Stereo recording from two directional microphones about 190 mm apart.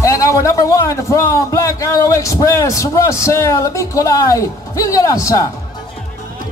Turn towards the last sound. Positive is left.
turn(degrees=15)  # may be behind; listen again after turning